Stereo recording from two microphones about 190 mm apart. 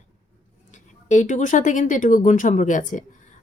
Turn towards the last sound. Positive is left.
turn(degrees=40)  # may be behind; listen again after turning